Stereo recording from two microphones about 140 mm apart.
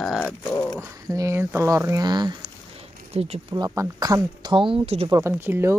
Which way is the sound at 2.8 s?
50° right (ahead or behind).